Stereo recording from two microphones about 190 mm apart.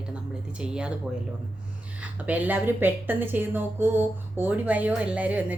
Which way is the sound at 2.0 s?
10° right (ahead or behind).